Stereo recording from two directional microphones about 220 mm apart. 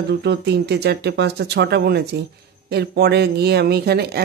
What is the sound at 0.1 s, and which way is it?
A woman's voice, 50° right (ahead or behind).